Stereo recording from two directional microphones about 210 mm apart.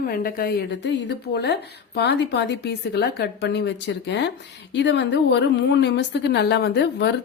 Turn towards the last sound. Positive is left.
turn(degrees=55)  # may be behind; listen again after turning